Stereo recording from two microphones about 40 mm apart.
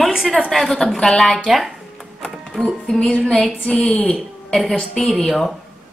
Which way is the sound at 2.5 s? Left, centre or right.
Centre.